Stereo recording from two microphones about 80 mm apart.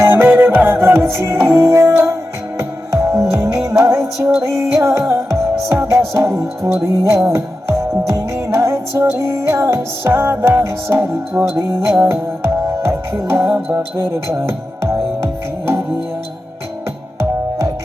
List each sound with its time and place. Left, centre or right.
0.0 s music: right